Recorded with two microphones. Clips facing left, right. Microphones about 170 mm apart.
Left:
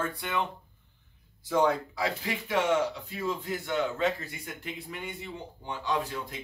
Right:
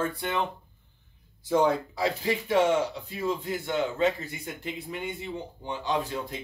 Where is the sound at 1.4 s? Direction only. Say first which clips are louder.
Right 2 dB; 30° right (ahead or behind).